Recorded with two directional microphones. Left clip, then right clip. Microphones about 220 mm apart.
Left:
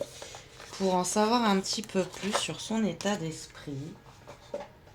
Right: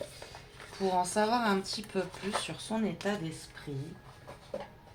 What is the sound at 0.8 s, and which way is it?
Speech, 50° left (ahead or behind).